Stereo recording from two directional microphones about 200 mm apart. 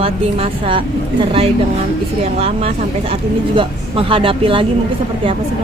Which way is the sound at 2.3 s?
30° right (ahead or behind).